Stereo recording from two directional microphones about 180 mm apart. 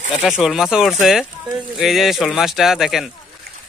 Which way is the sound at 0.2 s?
Centre (ahead or behind).